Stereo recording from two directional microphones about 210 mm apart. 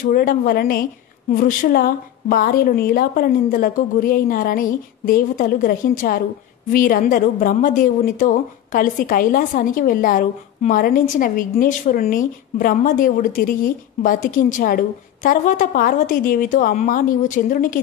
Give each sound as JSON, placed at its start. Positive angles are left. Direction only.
{"t": 0.0, "sound": "a woman's voice", "side_deg": 45}